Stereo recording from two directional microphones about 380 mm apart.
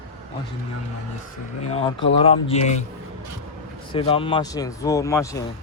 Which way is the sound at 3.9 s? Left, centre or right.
Centre.